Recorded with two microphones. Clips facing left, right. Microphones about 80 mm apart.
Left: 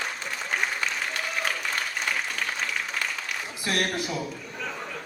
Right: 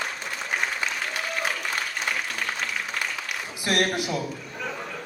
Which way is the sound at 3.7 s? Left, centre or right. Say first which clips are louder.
Right 3 dB; centre.